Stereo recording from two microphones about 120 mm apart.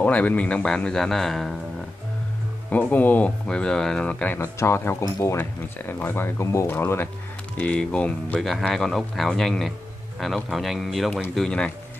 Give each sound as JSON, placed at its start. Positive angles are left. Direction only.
{"t": 0.0, "sound": "speech", "side_deg": 10}
{"t": 2.7, "sound": "speech", "side_deg": 15}
{"t": 4.4, "sound": "speech", "side_deg": 20}